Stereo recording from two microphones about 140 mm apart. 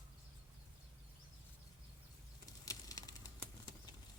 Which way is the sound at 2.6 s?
25° left (ahead or behind).